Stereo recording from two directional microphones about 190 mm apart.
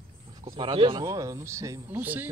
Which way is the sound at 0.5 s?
25° right (ahead or behind).